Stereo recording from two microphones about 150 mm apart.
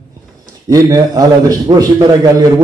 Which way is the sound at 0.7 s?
25° right (ahead or behind).